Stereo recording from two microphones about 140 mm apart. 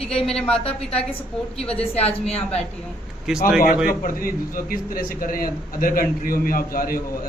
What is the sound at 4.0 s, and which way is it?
A man's voice, 85° left.